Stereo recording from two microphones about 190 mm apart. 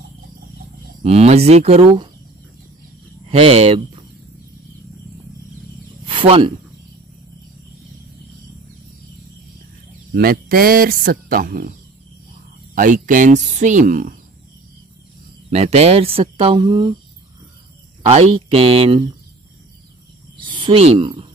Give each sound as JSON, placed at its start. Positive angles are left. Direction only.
{"t": 1.0, "sound": "speech", "side_deg": -35}
{"t": 3.3, "sound": "speech", "side_deg": -30}
{"t": 6.0, "sound": "cricket", "side_deg": -30}
{"t": 10.1, "sound": "speech", "side_deg": -55}
{"t": 12.7, "sound": "speech", "side_deg": -45}
{"t": 15.5, "sound": "speech", "side_deg": -35}
{"t": 18.0, "sound": "speech", "side_deg": -30}
{"t": 20.5, "sound": "speech", "side_deg": -30}